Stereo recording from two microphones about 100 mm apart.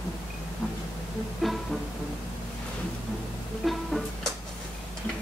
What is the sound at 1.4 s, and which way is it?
Music, centre (ahead or behind).